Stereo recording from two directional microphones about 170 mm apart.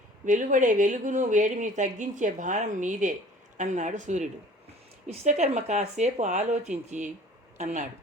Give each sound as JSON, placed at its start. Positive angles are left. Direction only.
{"t": 0.3, "sound": "speech", "side_deg": -50}